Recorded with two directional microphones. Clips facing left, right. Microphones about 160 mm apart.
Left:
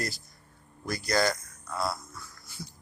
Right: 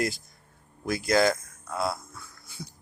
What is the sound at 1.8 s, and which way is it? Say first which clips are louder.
Music: right 2 dB; 55° right (ahead or behind).